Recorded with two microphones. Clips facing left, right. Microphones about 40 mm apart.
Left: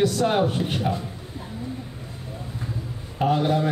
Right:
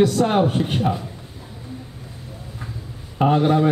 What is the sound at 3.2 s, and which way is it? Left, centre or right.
Speech, right.